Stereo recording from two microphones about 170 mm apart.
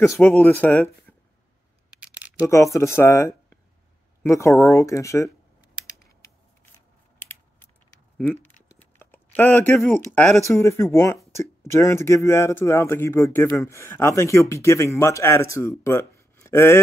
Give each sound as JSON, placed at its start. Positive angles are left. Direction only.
{"t": 0.4, "sound": "speech", "side_deg": 10}
{"t": 2.0, "sound": "scissors", "side_deg": -10}
{"t": 2.4, "sound": "speech", "side_deg": 20}
{"t": 8.7, "sound": "speech", "side_deg": 10}
{"t": 10.6, "sound": "speech", "side_deg": 15}